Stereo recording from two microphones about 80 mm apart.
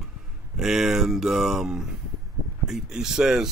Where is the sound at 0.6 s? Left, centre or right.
Centre.